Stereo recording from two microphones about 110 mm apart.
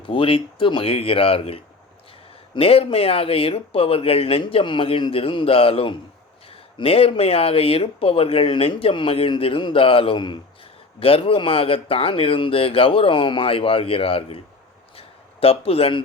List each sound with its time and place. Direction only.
0.0 s speech: 50° left (ahead or behind)
2.6 s speech: 60° left (ahead or behind)
14.9 s a sound: 60° left (ahead or behind)